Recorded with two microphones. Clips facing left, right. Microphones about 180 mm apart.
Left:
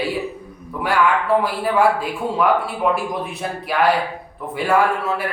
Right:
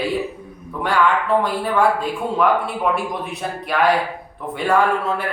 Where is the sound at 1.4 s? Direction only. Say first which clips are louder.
Left 1 dB; 5° left (ahead or behind).